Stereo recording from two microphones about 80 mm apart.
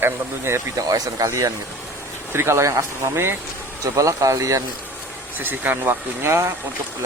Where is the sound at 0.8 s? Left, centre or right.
Right.